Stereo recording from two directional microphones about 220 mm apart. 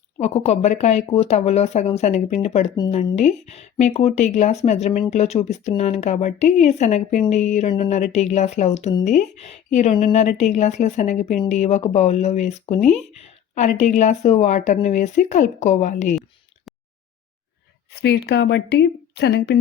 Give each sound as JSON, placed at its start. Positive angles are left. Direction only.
{"t": 0.2, "sound": "speech", "side_deg": 30}
{"t": 17.9, "sound": "a woman's voice", "side_deg": 50}